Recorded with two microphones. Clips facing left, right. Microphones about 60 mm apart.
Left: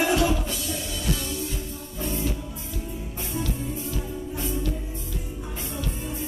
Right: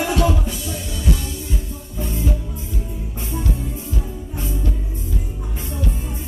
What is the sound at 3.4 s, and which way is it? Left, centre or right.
Music, right.